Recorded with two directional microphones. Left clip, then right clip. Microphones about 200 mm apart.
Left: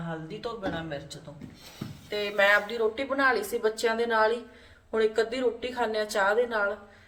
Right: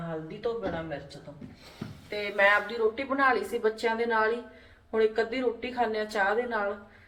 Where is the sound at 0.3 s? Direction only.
25° left (ahead or behind).